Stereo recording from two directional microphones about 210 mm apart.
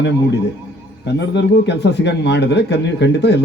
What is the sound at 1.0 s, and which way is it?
A man's voice, 55° left (ahead or behind).